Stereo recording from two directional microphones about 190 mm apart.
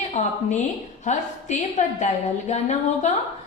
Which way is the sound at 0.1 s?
35° left (ahead or behind).